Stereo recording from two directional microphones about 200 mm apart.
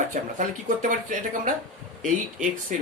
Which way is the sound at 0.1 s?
40° right (ahead or behind).